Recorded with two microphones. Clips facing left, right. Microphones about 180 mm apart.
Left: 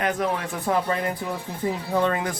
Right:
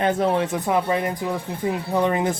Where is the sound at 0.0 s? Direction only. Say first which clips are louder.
Right 5 dB; 30° right (ahead or behind).